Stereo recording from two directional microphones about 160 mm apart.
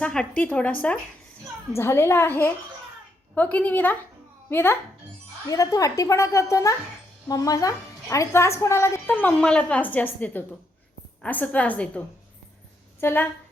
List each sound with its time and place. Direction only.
0.0 s a woman's voice: 5° left (ahead or behind)